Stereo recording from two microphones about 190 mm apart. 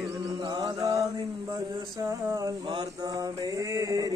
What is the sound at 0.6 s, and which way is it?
Mantra, 20° right (ahead or behind).